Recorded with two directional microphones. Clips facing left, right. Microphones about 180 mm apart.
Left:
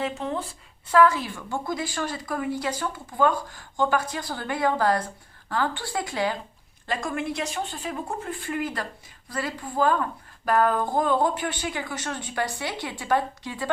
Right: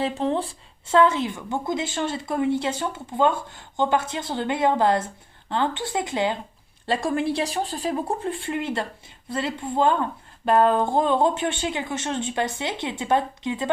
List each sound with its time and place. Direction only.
0.0 s speech: 30° right (ahead or behind)